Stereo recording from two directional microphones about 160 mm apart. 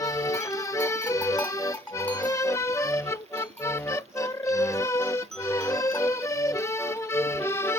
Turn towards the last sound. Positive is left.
turn(degrees=15)  # may be behind; listen again after turning